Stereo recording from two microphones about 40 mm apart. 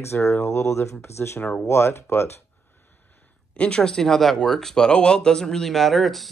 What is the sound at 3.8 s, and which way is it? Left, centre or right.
Speech, centre.